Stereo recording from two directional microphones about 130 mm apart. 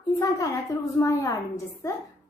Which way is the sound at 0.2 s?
25° left (ahead or behind).